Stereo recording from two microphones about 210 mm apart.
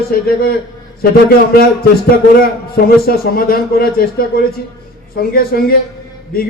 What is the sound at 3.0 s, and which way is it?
Speech, 45° left (ahead or behind).